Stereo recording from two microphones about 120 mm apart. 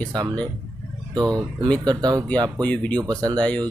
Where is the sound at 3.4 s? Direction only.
10° left (ahead or behind).